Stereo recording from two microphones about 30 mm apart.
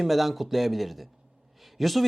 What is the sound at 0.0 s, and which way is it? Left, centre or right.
Speech, centre.